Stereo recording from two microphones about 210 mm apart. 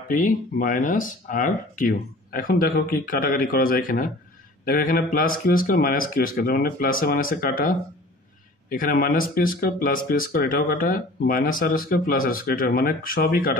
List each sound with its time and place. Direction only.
0.1 s speech: 40° left (ahead or behind)